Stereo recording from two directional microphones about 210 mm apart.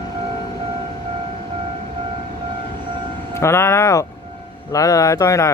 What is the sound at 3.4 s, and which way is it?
Speech, 15° left (ahead or behind).